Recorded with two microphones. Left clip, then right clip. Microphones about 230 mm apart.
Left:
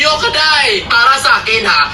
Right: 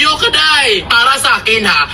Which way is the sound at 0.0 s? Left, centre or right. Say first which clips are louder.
Right 1 dB; right.